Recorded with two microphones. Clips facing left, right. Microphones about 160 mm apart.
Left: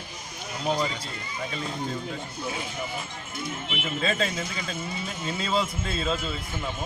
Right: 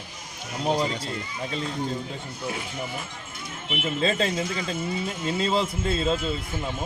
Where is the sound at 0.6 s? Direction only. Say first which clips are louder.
Right 2 dB; 25° right (ahead or behind).